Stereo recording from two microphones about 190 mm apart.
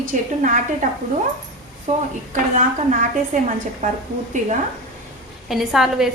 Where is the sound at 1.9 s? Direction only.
35° right (ahead or behind).